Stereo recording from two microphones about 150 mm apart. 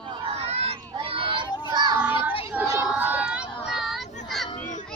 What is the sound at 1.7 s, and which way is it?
Child singing, 25° right (ahead or behind).